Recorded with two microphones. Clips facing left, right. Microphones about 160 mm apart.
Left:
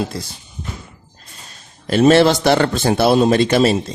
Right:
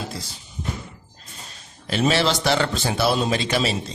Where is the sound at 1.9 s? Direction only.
50° left (ahead or behind).